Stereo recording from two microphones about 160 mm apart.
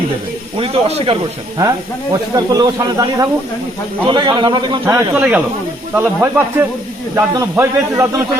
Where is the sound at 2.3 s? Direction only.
20° right (ahead or behind).